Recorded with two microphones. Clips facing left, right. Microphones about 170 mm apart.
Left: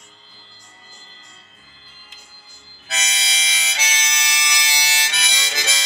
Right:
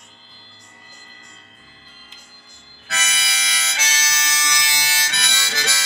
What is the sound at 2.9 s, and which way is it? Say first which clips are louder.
Harmonica: right 1 dB; 20° left (ahead or behind).